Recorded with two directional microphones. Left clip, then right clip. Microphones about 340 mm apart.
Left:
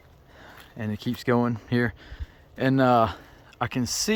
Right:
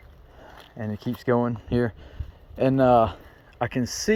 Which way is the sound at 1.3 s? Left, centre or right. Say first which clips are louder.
Right 1 dB; centre.